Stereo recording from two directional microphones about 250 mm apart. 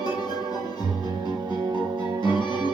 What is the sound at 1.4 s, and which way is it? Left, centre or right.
Music, centre.